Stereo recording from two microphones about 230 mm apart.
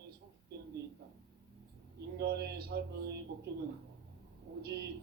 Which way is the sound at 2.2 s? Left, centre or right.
Right.